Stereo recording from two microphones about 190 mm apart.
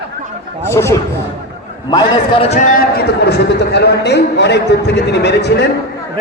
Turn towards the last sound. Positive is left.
turn(degrees=60)  # may be behind; listen again after turning